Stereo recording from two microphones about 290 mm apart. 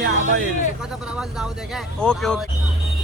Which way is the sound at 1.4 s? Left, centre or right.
Centre.